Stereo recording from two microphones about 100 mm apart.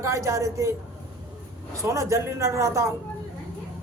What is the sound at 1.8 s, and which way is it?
Speech, 30° right (ahead or behind).